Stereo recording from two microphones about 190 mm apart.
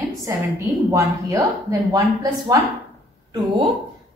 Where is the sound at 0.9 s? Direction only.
20° right (ahead or behind).